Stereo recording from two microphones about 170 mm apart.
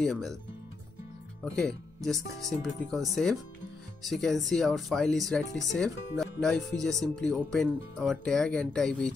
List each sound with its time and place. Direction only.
0.0 s speech: centre (ahead or behind)
1.4 s speech: 5° left (ahead or behind)